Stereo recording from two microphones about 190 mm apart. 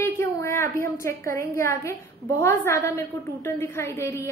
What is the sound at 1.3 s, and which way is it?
A woman's voice, 15° left (ahead or behind).